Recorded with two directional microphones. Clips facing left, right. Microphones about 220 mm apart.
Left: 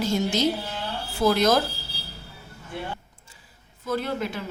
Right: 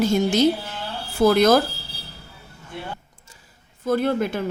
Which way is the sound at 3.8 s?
50° right (ahead or behind).